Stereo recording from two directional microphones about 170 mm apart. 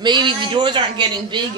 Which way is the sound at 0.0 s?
25° right (ahead or behind).